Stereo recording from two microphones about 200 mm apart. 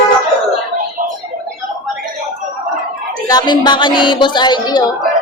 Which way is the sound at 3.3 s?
20° left (ahead or behind).